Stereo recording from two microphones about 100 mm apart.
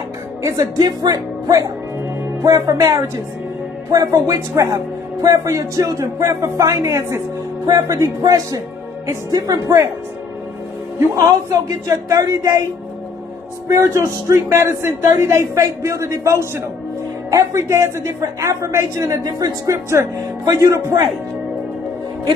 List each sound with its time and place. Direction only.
0.4 s speech: 35° right (ahead or behind)
11.5 s speech: 35° right (ahead or behind)
13.7 s speech: 25° right (ahead or behind)